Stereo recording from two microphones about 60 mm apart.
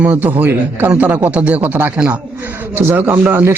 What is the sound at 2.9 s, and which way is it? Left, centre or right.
Speech, right.